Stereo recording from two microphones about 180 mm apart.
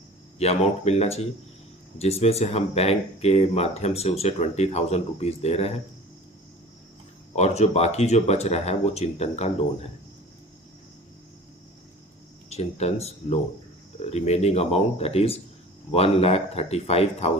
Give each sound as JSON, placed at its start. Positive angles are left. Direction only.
{"t": 0.3, "sound": "speech", "side_deg": 35}
{"t": 7.3, "sound": "speech", "side_deg": 40}
{"t": 12.5, "sound": "speech", "side_deg": 35}